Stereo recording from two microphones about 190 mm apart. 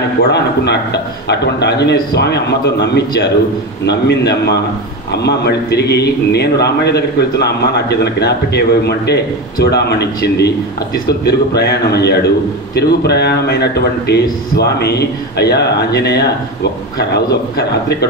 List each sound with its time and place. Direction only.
0.3 s a man's voice: 60° left (ahead or behind)